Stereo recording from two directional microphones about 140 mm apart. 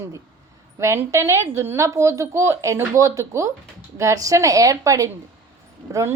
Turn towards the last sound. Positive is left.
turn(degrees=-20)  # may be behind; listen again after turning